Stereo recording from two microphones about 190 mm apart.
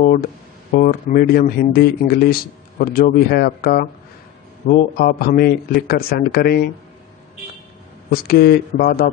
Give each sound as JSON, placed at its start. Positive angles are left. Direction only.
{"t": 0.7, "sound": "a man's voice", "side_deg": 55}
{"t": 8.1, "sound": "a man's voice", "side_deg": 55}